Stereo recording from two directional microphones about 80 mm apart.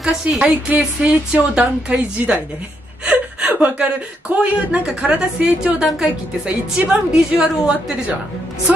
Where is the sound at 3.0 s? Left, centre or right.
Centre.